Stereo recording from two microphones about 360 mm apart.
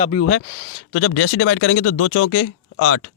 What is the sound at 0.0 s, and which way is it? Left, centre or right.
Speech, left.